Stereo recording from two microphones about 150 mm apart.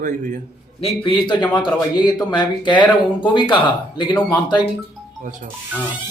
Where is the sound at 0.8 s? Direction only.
35° left (ahead or behind).